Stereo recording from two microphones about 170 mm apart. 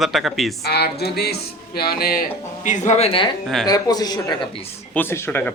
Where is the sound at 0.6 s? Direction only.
70° left (ahead or behind); by 3.3 s 30° left (ahead or behind).